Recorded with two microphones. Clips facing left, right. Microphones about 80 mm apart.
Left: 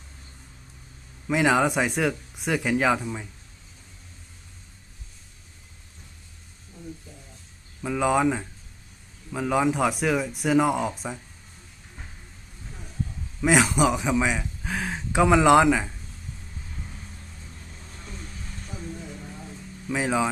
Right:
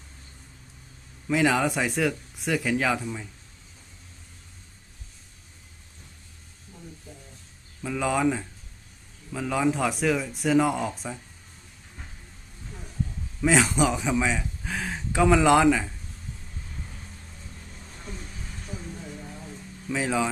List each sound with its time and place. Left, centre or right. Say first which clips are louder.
1.3 s speech: left 2 dB; left
7.8 s a man's voice: left 3 dB; centre
13.4 s a man's voice: left 1 dB; centre
19.9 s a man's voice: left 2 dB; centre